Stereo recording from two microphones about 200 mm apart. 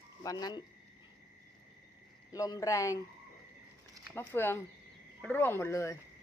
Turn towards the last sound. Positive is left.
turn(degrees=15)  # may be behind; listen again after turning